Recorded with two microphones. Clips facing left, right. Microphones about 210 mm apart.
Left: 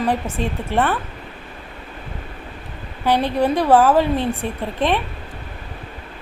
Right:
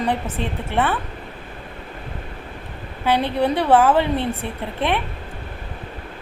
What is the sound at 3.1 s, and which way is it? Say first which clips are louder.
A woman's voice: left 1 dB; 10° left (ahead or behind).